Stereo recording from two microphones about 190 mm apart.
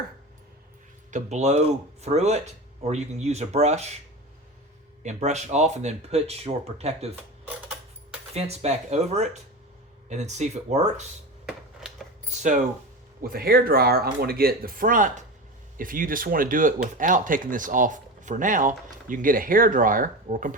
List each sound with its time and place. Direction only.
1.1 s speech: 35° right (ahead or behind)
5.0 s speech: 35° right (ahead or behind)
8.3 s speech: 35° right (ahead or behind)
11.4 s a sound: centre (ahead or behind)
12.3 s speech: 40° right (ahead or behind)
13.2 s speech: 55° right (ahead or behind)